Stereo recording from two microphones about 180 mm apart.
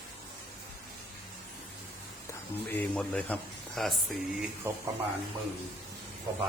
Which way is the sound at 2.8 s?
5° left (ahead or behind).